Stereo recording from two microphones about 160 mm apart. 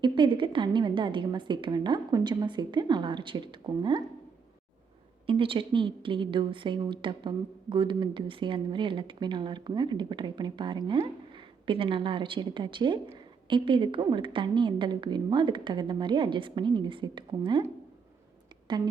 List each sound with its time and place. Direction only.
0.0 s a woman's voice: 30° right (ahead or behind)
5.2 s a woman's voice: 35° right (ahead or behind)